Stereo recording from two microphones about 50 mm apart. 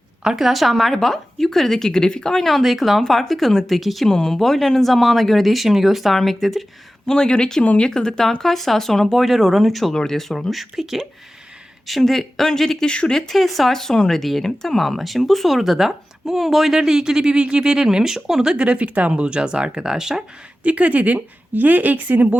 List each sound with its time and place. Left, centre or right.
0.3 s speech: centre
4.1 s speech: centre
7.1 s speech: centre
12.9 s speech: centre
13.1 s speech: centre
18.5 s speech: right
20.7 s speech: right